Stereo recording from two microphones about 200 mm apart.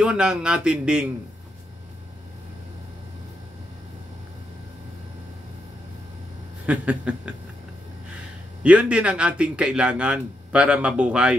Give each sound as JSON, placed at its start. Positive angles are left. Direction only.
{"t": 0.0, "sound": "a man's voice", "side_deg": -5}
{"t": 6.6, "sound": "a sound", "side_deg": -5}
{"t": 8.6, "sound": "a man's voice", "side_deg": -5}